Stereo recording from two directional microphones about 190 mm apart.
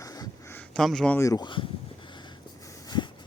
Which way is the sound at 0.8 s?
Centre (ahead or behind).